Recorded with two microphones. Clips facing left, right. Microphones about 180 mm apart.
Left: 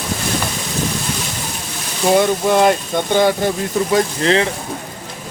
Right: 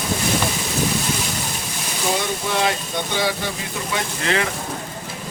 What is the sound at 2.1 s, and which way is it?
Speech, 55° left (ahead or behind).